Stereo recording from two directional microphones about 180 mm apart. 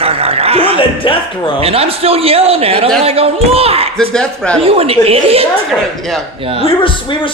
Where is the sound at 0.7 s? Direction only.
30° left (ahead or behind).